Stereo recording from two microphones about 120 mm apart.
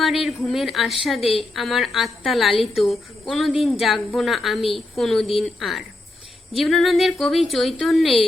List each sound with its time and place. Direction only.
0.0 s speech: centre (ahead or behind)